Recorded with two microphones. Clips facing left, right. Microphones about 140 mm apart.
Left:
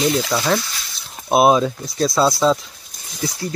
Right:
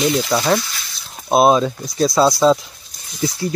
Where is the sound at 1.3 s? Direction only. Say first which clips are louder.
Right 1 dB; 5° left (ahead or behind).